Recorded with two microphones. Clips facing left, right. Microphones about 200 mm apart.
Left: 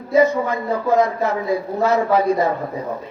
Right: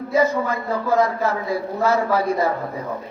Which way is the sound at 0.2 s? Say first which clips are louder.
Left 4 dB; 20° left (ahead or behind).